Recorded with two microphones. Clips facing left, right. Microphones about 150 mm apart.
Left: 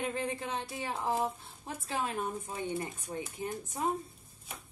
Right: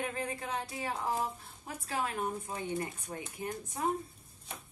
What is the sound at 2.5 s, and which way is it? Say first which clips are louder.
Female singing: even; 25° left (ahead or behind).